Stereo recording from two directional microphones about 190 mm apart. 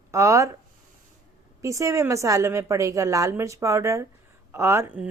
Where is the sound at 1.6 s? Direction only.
15° right (ahead or behind).